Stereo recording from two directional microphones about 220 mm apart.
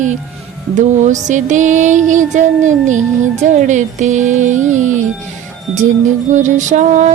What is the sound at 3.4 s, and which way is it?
Music, 35° right (ahead or behind).